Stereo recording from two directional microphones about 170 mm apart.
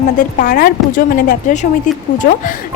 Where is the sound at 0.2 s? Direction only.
50° left (ahead or behind).